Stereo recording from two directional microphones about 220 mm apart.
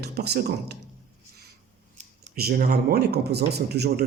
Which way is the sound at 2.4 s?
45° right (ahead or behind).